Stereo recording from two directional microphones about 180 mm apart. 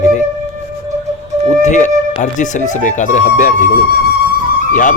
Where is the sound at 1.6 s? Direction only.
45° left (ahead or behind).